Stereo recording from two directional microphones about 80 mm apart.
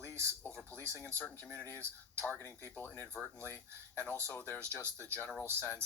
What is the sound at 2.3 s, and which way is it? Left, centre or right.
Speech, left.